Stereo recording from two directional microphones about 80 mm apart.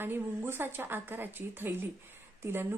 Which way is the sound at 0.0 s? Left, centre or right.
Right.